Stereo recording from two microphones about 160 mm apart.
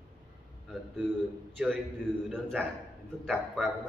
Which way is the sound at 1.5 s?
Centre (ahead or behind).